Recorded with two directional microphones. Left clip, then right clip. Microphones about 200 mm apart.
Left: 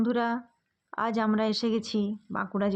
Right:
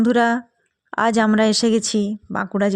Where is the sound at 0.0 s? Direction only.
45° right (ahead or behind).